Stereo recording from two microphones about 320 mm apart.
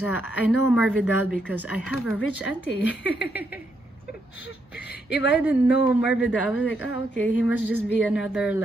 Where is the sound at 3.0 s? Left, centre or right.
Left.